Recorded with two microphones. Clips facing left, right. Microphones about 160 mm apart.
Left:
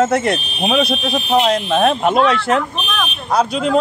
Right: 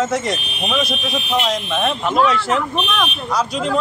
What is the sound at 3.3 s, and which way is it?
Speech, 60° left (ahead or behind).